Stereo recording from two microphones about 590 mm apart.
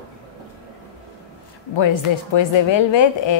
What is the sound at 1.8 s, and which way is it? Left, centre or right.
A woman's voice, left.